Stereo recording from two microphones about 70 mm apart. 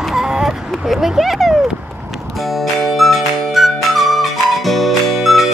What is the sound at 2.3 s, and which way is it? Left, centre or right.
Music, centre.